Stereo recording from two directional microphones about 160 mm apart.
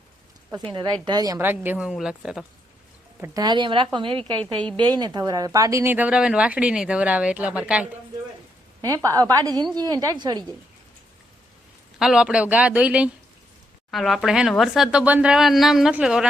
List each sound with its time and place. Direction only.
0.7 s speech: 30° right (ahead or behind)
1.4 s speech: 15° right (ahead or behind)
3.3 s a woman's voice: 25° right (ahead or behind); by 7.9 s 5° right (ahead or behind)
9.0 s speech: 20° right (ahead or behind)
11.9 s speech: 5° right (ahead or behind)